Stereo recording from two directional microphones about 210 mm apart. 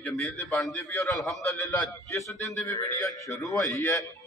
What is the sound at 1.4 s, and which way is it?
A man's voice, 15° left (ahead or behind).